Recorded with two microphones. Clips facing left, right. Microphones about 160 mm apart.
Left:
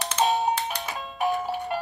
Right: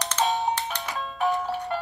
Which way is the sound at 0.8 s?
20° left (ahead or behind).